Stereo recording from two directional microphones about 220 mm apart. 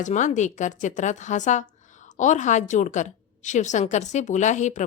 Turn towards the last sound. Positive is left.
turn(degrees=35)  # may be behind; listen again after turning